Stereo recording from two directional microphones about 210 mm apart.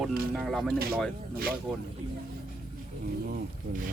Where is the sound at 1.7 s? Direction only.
Centre (ahead or behind).